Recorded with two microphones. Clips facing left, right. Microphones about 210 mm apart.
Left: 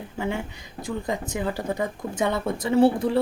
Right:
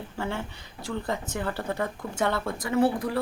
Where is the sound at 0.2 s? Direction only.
15° left (ahead or behind).